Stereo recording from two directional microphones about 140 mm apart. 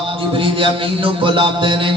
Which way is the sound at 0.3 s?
40° right (ahead or behind).